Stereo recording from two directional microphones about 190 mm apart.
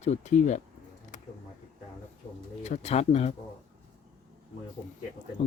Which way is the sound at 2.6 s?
35° left (ahead or behind).